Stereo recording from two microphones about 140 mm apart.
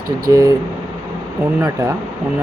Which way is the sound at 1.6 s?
20° right (ahead or behind).